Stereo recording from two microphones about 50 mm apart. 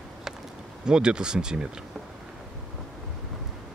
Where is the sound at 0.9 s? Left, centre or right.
Centre.